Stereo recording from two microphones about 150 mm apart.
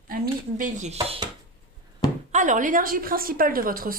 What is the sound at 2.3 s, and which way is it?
Speech, 60° right (ahead or behind).